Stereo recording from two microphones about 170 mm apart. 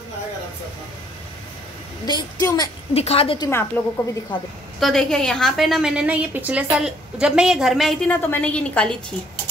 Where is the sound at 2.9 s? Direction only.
35° left (ahead or behind).